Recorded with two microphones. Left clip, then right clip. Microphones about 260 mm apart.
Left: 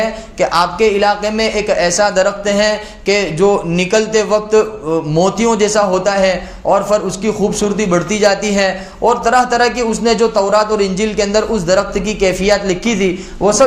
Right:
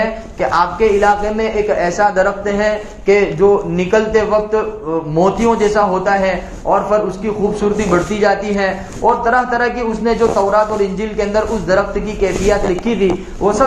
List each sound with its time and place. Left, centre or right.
0.3 s speech: left